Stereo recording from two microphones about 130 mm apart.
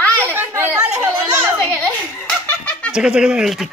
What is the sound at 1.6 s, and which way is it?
Giggle, 10° left (ahead or behind).